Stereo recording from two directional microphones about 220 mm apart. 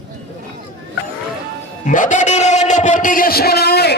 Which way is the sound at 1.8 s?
35° left (ahead or behind).